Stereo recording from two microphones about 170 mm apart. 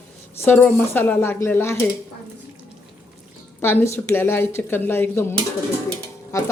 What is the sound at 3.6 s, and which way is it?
Speech, 15° left (ahead or behind).